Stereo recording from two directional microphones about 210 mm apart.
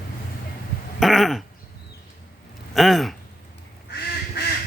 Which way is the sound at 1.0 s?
Centre (ahead or behind).